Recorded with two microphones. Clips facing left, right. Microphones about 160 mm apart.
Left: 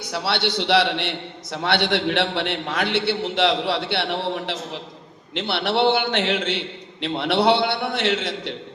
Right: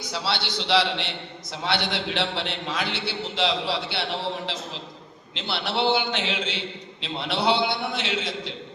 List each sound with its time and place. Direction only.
0.1 s a man's voice: 60° left (ahead or behind)